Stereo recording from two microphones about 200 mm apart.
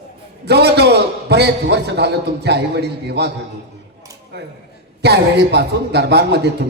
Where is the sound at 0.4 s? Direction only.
55° right (ahead or behind).